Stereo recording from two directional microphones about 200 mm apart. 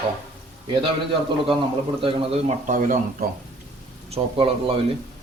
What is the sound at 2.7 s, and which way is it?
Speech, 40° right (ahead or behind).